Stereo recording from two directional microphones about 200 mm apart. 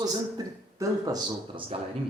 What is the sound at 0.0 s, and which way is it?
Speech, 20° right (ahead or behind).